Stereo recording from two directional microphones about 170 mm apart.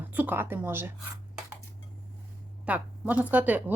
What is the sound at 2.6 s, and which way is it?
Speech, 10° right (ahead or behind).